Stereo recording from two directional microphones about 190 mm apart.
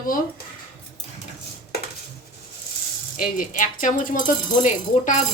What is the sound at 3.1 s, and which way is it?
A woman's voice, 45° left (ahead or behind).